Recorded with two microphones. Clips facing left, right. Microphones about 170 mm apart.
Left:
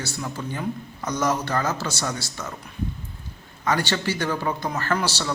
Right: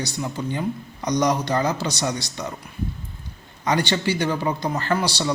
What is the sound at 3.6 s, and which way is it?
A man's voice, 20° right (ahead or behind).